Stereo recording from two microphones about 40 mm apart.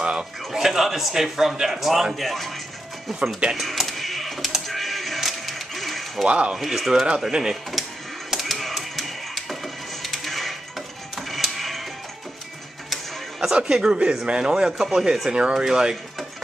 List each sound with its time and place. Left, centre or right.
0.0 s a sound: right
0.5 s a man's voice: centre
3.5 s bleat: centre
4.6 s music: centre
6.2 s speech: right
6.5 s a man's voice: centre
7.2 s a man's voice: centre
7.7 s a sound: centre
8.3 s music: centre
11.1 s printer: centre
12.9 s music: centre
13.7 s a man's voice: centre
15.3 s speech: right
15.6 s speech: centre